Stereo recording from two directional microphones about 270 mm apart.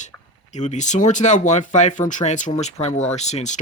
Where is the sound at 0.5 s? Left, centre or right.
Left.